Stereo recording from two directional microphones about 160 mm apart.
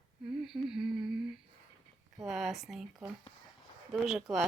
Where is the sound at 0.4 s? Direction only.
Centre (ahead or behind).